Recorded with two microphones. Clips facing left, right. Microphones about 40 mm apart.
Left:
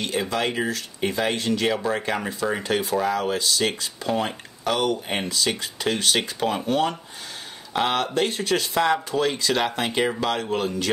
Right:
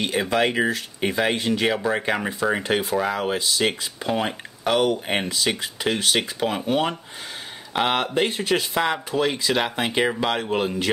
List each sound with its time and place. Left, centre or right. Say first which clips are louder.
0.0 s speech: right 3 dB; right